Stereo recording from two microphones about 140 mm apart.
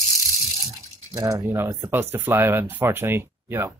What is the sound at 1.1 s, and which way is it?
Speech, 25° right (ahead or behind).